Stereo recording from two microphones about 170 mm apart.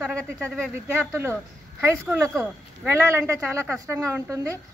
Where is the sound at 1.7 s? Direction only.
15° right (ahead or behind).